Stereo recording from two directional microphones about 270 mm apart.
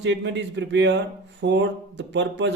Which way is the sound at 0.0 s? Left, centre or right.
Right.